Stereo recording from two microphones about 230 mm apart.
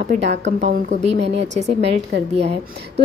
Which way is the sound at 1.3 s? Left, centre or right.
Right.